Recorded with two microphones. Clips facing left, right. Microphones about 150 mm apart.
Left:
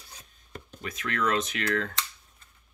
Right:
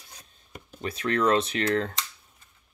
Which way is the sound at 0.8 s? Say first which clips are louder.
Right 5 dB; 35° right (ahead or behind).